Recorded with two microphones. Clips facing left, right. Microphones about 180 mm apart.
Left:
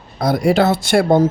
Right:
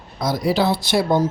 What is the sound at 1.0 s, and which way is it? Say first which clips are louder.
Speech: left 6 dB; 50° left (ahead or behind).